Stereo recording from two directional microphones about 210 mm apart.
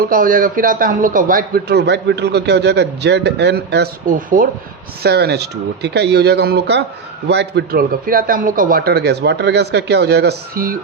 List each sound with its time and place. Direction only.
0.0 s a man's voice: 40° right (ahead or behind)
5.0 s a man's voice: 50° right (ahead or behind)